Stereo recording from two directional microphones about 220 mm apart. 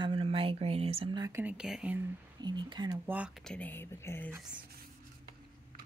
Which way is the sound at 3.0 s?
5° right (ahead or behind).